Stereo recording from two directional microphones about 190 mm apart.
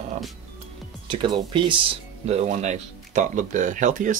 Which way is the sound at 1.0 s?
25° right (ahead or behind).